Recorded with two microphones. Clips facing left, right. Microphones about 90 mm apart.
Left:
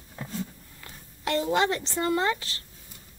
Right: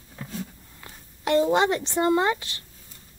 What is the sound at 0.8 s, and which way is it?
Speech, 25° right (ahead or behind).